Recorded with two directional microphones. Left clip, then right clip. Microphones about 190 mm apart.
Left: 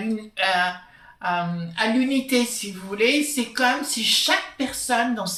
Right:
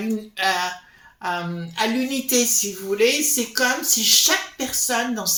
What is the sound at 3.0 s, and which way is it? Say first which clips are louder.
Speech: right 1 dB; 45° right (ahead or behind).